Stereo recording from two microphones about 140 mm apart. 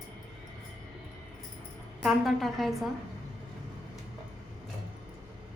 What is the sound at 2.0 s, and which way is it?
Speech, centre (ahead or behind).